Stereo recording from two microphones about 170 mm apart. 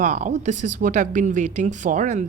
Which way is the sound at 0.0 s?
45° right (ahead or behind).